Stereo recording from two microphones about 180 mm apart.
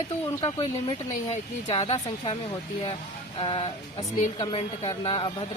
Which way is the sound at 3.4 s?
30° left (ahead or behind).